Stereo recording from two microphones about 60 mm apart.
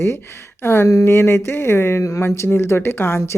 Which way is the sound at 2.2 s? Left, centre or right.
Left.